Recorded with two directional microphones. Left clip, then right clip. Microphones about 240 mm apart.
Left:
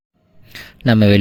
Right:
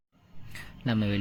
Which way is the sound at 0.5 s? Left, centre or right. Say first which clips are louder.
Left 15 dB; left.